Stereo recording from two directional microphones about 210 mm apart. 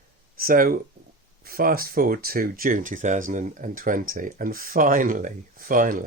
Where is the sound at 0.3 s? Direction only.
45° right (ahead or behind).